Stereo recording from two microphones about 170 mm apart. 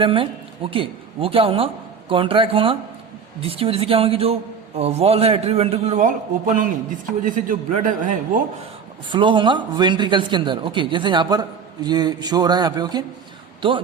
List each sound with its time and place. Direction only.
0.0 s a woman's voice: 30° right (ahead or behind)
6.1 s a man's voice: 50° right (ahead or behind)
9.0 s speech: 30° right (ahead or behind)